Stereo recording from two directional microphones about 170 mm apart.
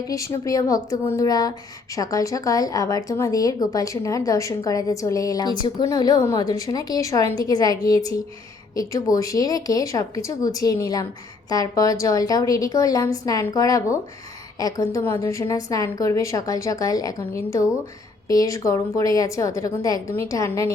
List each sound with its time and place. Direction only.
0.1 s speech: 20° left (ahead or behind)